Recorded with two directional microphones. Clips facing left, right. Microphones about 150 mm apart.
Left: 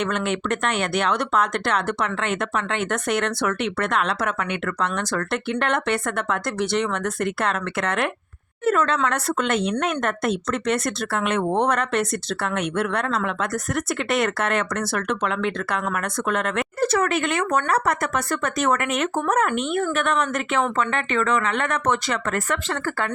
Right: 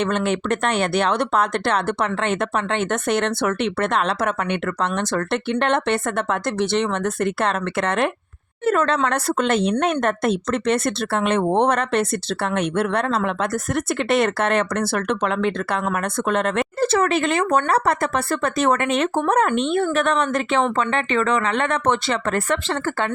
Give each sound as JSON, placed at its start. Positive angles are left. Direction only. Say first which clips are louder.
{"t": 0.0, "sound": "speech", "louder": "right 3 dB", "side_deg": -30}